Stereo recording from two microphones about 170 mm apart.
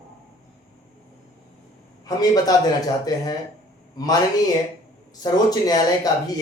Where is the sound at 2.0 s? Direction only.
20° left (ahead or behind).